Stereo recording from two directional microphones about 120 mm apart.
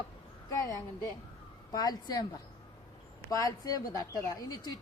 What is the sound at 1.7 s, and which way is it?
Speech, 35° left (ahead or behind).